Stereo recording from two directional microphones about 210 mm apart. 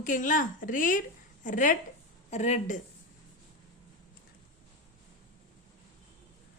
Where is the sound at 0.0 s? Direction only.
40° left (ahead or behind).